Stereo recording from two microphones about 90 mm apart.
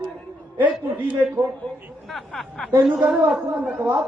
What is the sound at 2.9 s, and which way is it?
A woman's voice, 10° right (ahead or behind).